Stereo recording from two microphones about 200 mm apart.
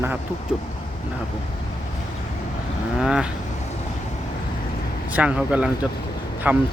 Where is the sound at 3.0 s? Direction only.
5° right (ahead or behind).